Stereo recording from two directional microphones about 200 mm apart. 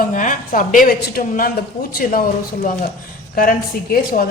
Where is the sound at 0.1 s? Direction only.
40° left (ahead or behind).